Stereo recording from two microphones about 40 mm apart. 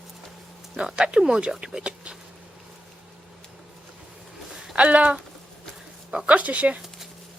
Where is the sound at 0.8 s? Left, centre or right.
Right.